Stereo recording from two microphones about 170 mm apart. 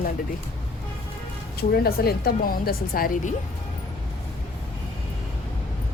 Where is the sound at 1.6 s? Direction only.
65° left (ahead or behind).